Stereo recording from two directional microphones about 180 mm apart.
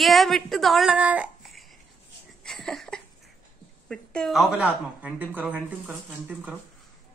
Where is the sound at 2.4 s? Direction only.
Centre (ahead or behind).